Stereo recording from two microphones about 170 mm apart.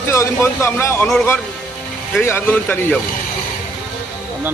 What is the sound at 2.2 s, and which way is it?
Speech, 15° left (ahead or behind).